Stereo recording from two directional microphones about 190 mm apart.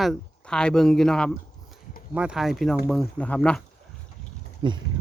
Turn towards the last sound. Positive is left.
turn(degrees=-25)  # may be behind; listen again after turning